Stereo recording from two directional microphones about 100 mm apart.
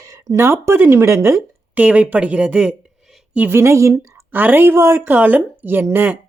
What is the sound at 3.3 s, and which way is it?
Speech, 20° right (ahead or behind).